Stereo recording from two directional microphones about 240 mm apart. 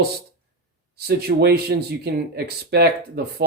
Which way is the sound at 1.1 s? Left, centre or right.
Right.